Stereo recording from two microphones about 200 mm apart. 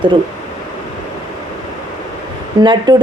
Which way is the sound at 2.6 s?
25° right (ahead or behind).